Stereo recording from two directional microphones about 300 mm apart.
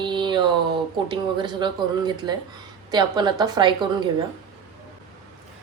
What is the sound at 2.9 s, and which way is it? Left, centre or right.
A woman's voice, centre.